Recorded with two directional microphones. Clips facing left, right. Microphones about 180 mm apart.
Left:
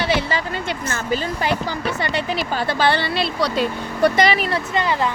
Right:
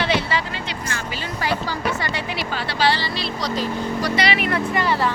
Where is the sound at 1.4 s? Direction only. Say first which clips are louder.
Left 2 dB; 20° left (ahead or behind).